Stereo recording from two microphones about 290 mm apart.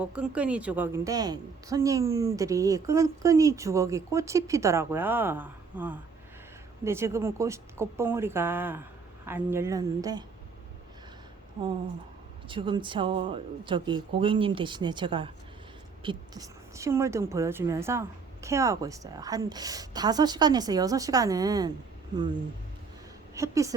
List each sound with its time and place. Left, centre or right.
0.0 s a woman's voice: centre
12.5 s a woman's voice: centre
23.3 s a woman's voice: centre